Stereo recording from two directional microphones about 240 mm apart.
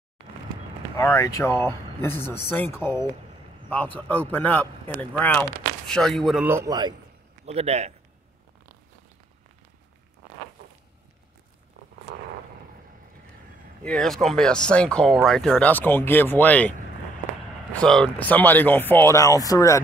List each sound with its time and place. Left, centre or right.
0.9 s a man's voice: centre; by 7.9 s right
13.8 s speech: centre
17.7 s speech: centre